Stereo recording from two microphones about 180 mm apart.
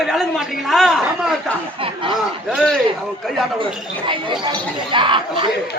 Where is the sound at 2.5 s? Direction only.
5° left (ahead or behind).